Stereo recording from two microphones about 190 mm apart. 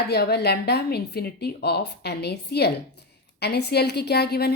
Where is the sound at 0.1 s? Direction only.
60° left (ahead or behind).